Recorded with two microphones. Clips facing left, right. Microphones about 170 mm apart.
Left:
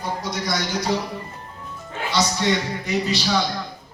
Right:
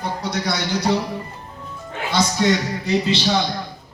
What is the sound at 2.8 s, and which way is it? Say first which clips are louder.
Speech: right 3 dB; 30° right (ahead or behind).